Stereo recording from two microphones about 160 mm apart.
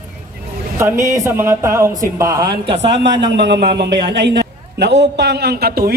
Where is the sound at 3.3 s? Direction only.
90° right.